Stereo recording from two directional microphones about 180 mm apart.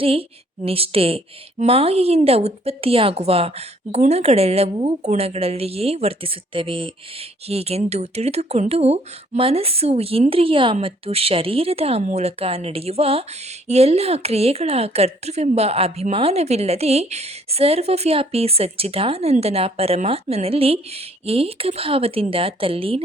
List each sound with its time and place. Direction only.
0.0 s a woman's voice: 30° right (ahead or behind)